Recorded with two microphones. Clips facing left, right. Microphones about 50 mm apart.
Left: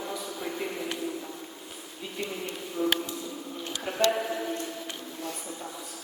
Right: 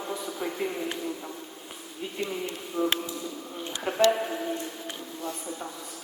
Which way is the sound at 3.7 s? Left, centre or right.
Right.